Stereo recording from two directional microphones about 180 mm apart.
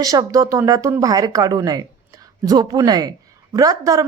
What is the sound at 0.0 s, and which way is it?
A woman's voice, 20° right (ahead or behind).